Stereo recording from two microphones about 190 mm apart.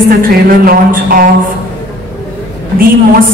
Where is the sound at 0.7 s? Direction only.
50° right (ahead or behind).